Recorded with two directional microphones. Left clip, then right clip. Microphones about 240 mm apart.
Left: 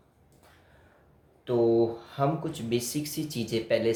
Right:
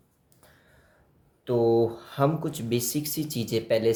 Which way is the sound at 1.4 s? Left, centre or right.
Right.